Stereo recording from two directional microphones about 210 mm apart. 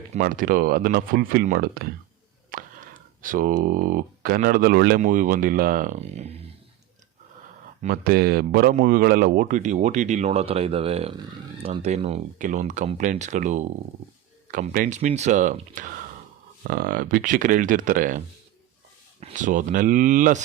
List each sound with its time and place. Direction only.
0.1 s speech: 40° right (ahead or behind)
7.8 s speech: 45° right (ahead or behind)
19.2 s speech: 35° right (ahead or behind)